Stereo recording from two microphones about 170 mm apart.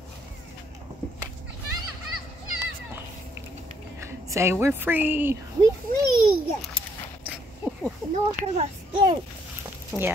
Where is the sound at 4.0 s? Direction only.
15° right (ahead or behind).